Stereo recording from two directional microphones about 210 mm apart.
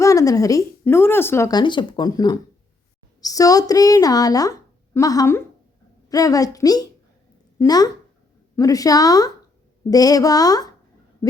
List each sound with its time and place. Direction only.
0.0 s speech: 15° left (ahead or behind)